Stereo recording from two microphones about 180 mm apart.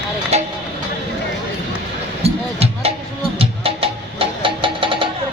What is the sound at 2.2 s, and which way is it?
Music, 35° right (ahead or behind).